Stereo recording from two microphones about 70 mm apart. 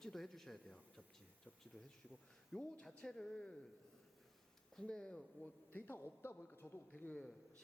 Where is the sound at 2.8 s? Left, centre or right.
Centre.